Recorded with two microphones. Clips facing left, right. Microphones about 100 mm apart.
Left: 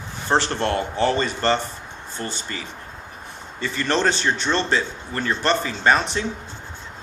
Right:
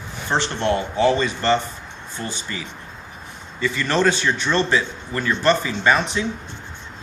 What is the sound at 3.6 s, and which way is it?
Speech, 35° left (ahead or behind).